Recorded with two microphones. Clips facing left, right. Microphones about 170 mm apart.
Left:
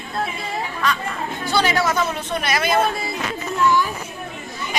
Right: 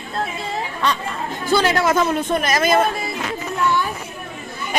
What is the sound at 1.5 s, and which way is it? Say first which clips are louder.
Speech: right 3 dB; 50° right (ahead or behind).